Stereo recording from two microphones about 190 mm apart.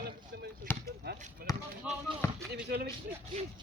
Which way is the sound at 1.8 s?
5° right (ahead or behind).